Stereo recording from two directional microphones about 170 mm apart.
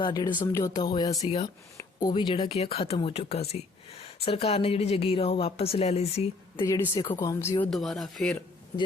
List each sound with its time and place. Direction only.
0.0 s speech: 25° left (ahead or behind)
6.6 s speech: 20° left (ahead or behind)
7.7 s speech: centre (ahead or behind)